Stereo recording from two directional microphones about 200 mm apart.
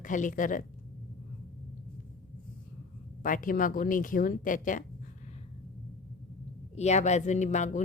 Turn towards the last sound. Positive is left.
turn(degrees=35)  # may be behind; listen again after turning